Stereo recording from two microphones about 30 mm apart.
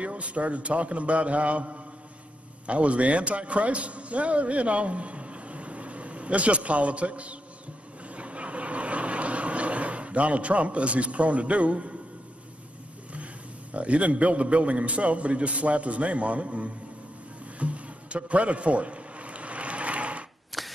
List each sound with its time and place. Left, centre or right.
0.0 s a man's voice: right
8.1 s vehicle: right
13.1 s a man's voice: right
17.6 s music: right
20.5 s camera: centre